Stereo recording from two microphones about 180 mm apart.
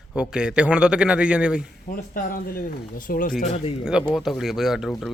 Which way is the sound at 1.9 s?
50° left (ahead or behind).